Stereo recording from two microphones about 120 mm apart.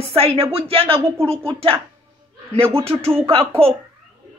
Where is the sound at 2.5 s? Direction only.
55° right (ahead or behind).